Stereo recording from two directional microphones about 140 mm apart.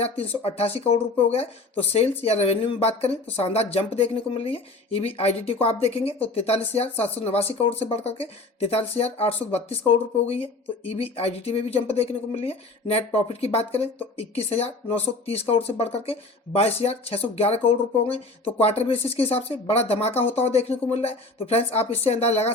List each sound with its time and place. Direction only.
0.0 s speech: 45° left (ahead or behind)